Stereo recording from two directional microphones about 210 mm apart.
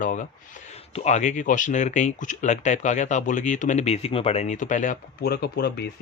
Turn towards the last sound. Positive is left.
turn(degrees=50)  # may be behind; listen again after turning